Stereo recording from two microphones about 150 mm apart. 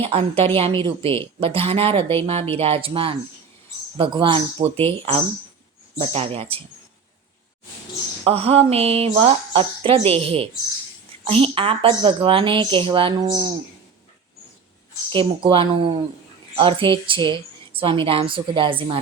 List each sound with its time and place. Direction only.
0.0 s a woman's voice: 40° right (ahead or behind)
8.2 s a woman's voice: 40° right (ahead or behind)
15.1 s a woman's voice: 35° right (ahead or behind)